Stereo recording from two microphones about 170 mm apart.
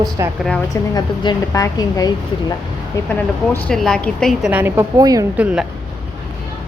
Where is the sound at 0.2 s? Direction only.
20° right (ahead or behind).